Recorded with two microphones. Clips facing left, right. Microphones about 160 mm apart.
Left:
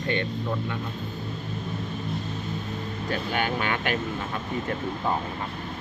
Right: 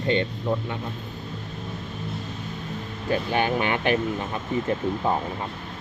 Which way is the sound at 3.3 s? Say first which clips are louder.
Right 3 dB; 20° right (ahead or behind).